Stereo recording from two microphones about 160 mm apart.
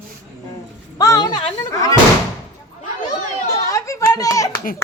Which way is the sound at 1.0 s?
25° left (ahead or behind).